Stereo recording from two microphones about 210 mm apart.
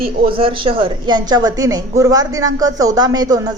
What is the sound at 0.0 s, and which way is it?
A woman's voice, 25° right (ahead or behind).